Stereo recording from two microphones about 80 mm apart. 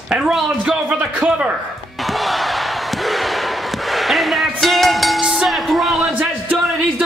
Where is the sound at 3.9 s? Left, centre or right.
Centre.